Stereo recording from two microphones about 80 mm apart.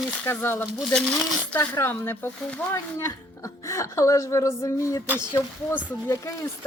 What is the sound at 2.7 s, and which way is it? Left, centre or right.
A woman's voice, left.